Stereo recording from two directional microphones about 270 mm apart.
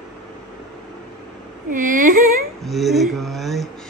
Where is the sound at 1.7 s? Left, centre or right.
Right.